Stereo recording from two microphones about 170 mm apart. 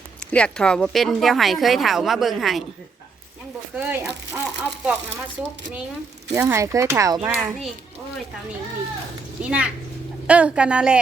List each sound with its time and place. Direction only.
0.2 s speech: 5° left (ahead or behind)
3.8 s a child's voice: 10° right (ahead or behind)
6.3 s a child's voice: 15° right (ahead or behind)
9.4 s a child's voice: 5° right (ahead or behind)